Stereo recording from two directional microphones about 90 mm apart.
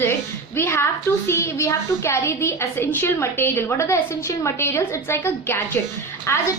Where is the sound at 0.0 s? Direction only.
25° left (ahead or behind).